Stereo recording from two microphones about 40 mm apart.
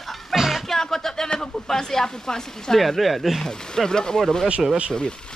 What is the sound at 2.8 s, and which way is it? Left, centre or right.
Speech, centre.